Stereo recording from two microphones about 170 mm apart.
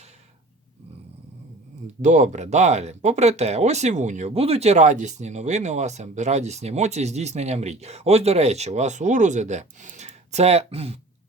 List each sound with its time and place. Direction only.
2.0 s speech: 45° right (ahead or behind)